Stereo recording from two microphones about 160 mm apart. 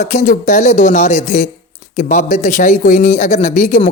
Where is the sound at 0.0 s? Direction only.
50° left (ahead or behind).